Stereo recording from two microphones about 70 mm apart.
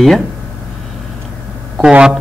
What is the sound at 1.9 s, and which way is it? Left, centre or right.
Speech, centre.